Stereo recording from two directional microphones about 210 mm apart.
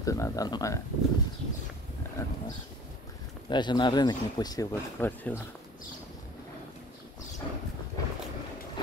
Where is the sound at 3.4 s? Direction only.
20° left (ahead or behind).